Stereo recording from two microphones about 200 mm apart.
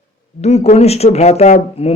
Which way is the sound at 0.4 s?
35° left (ahead or behind).